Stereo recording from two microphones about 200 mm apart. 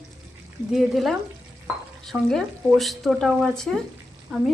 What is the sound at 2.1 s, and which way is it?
Speech, 5° right (ahead or behind).